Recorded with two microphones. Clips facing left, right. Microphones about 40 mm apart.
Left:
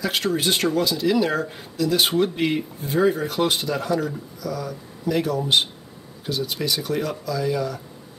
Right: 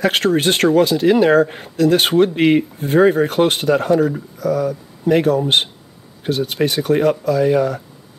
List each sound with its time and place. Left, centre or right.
0.0 s speech: right